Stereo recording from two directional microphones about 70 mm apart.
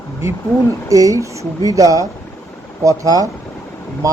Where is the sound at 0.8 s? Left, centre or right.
Right.